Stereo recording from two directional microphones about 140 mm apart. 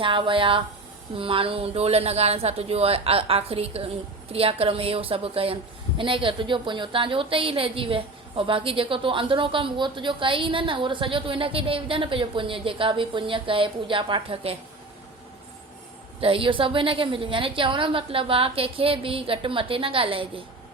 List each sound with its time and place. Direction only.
0.0 s a woman's voice: 35° right (ahead or behind)
16.2 s a woman's voice: 40° right (ahead or behind)